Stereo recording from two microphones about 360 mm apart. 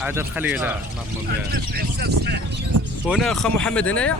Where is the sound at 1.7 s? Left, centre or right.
Right.